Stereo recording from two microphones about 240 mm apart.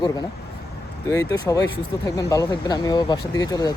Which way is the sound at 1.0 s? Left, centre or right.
Centre.